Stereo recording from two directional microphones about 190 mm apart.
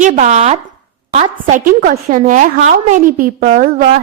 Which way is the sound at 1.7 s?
45° right (ahead or behind).